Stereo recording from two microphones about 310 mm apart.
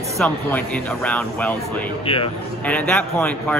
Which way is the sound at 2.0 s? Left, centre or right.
Centre.